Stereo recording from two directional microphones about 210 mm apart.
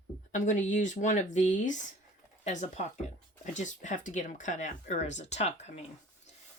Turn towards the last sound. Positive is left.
turn(degrees=30)  # may be behind; listen again after turning